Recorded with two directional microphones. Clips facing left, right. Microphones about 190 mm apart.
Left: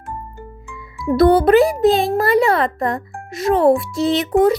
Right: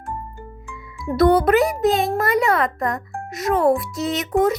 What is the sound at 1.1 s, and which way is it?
Music, 30° left (ahead or behind).